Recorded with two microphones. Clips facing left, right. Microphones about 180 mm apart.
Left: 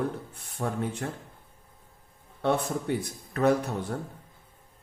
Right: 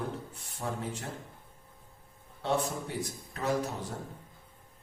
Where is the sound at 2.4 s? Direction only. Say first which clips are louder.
Left 4 dB; 60° left (ahead or behind).